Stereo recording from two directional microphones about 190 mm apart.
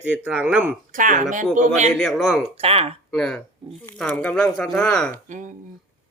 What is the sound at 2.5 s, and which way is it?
Speech, 30° right (ahead or behind).